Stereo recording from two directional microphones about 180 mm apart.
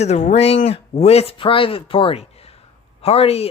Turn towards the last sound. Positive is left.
turn(degrees=35)  # may be behind; listen again after turning